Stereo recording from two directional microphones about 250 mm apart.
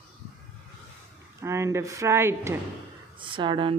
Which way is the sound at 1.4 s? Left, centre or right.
Centre.